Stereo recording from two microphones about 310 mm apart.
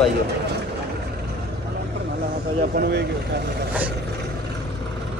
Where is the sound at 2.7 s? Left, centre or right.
Right.